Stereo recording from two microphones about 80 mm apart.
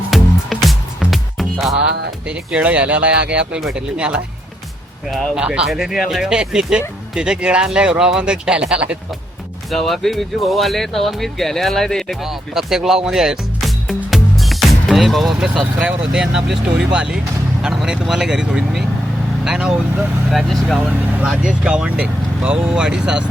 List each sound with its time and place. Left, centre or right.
0.1 s music: centre
2.2 s speech: centre
5.0 s speech: centre
9.6 s speech: centre
12.2 s music: centre
15.8 s speech: centre
20.3 s speech: centre
20.9 s speech: right
21.2 s speech: centre